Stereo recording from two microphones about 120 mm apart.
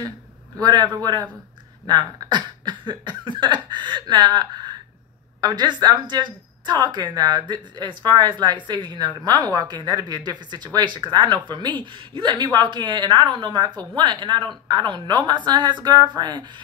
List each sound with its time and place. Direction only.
0.6 s a woman's voice: 35° right (ahead or behind)